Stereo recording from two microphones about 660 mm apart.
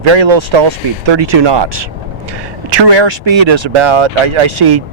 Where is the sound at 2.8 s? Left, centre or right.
Right.